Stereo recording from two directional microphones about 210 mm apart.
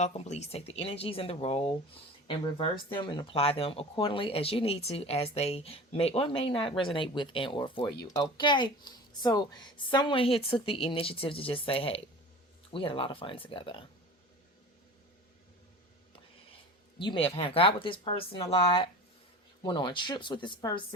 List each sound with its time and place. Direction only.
0.0 s speech: 30° left (ahead or behind)
17.0 s speech: 25° left (ahead or behind)